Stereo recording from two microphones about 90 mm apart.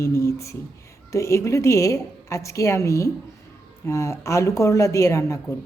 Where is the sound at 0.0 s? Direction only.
30° left (ahead or behind).